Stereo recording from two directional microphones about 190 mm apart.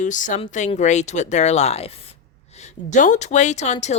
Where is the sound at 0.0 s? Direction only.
40° left (ahead or behind).